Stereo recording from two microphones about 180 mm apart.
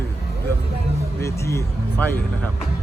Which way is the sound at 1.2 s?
15° left (ahead or behind).